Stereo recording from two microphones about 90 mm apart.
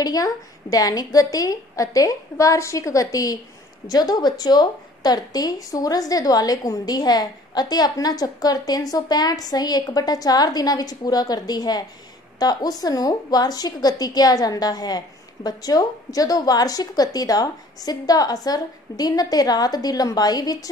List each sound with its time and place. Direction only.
0.0 s a woman's voice: 45° left (ahead or behind)